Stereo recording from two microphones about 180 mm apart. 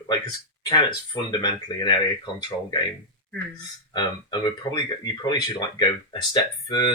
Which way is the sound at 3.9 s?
25° left (ahead or behind).